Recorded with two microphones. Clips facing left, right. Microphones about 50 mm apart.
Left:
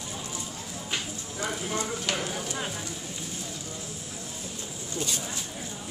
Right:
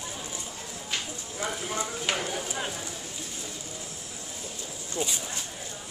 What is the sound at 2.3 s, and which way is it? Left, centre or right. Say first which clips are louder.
Speech: right 1 dB; centre.